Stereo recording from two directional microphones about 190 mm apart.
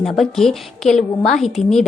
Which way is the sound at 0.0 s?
Centre (ahead or behind).